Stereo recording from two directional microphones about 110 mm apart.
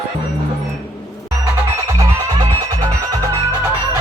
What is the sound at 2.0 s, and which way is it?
Music, 35° right (ahead or behind).